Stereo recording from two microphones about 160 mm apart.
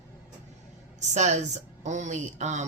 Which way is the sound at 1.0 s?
45° right (ahead or behind).